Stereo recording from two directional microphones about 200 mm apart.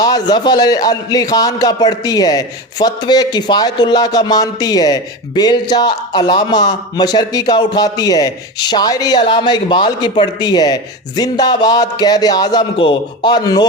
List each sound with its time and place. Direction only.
0.0 s a man's voice: 20° left (ahead or behind)